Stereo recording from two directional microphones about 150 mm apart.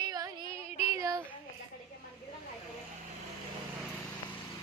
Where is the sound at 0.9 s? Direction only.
20° right (ahead or behind).